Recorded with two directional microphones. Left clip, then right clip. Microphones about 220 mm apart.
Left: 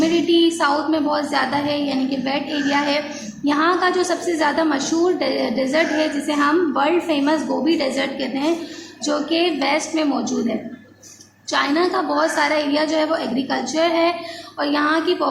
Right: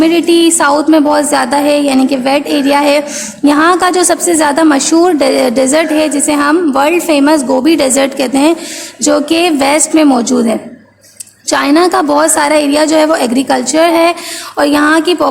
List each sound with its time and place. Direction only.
0.0 s a woman's voice: 50° right (ahead or behind)
11.4 s a woman's voice: 50° right (ahead or behind)